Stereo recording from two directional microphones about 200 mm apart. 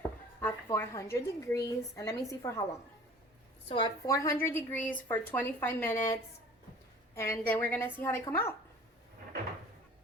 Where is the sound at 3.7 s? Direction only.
20° left (ahead or behind).